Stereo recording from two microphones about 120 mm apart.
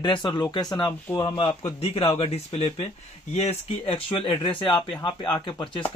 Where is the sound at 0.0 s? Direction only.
40° left (ahead or behind).